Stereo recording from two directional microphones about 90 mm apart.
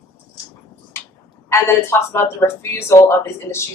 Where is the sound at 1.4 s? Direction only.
30° left (ahead or behind).